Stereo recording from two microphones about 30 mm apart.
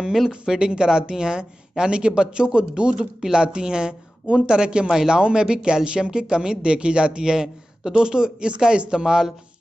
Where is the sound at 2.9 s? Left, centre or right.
Right.